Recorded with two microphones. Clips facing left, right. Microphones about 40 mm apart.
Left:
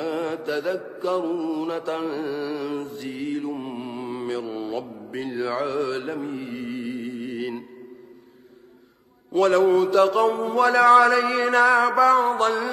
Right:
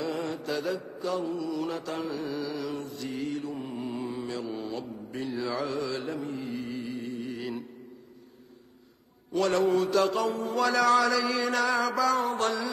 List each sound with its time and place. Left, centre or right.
0.0 s mantra: left
9.3 s mantra: left